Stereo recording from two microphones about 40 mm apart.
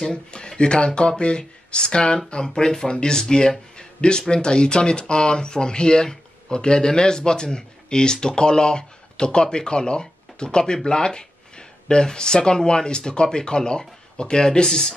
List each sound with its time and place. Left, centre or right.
0.0 s speech: left